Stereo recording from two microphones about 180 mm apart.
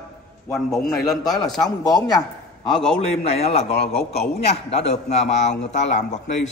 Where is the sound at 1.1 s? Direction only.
20° left (ahead or behind).